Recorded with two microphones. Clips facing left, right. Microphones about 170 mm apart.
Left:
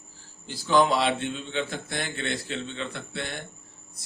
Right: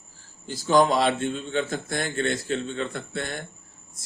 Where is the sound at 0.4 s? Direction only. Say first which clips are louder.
Right 2 dB; 45° right (ahead or behind).